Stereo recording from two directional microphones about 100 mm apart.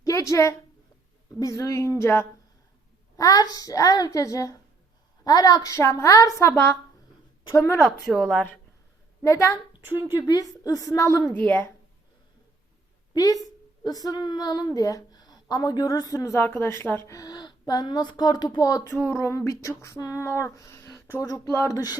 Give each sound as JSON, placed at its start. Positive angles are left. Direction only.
{"t": 0.0, "sound": "a woman's voice", "side_deg": 30}
{"t": 3.2, "sound": "speech", "side_deg": 40}
{"t": 7.8, "sound": "speech", "side_deg": 0}
{"t": 8.3, "sound": "speech", "side_deg": 10}
{"t": 9.2, "sound": "speech", "side_deg": 35}
{"t": 11.3, "sound": "speech", "side_deg": 15}
{"t": 13.1, "sound": "a woman's voice", "side_deg": 35}
{"t": 19.0, "sound": "speech", "side_deg": 30}